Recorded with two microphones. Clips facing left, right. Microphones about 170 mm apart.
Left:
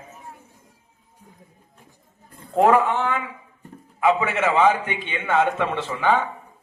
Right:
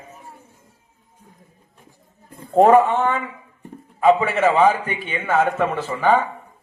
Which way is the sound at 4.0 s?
15° right (ahead or behind).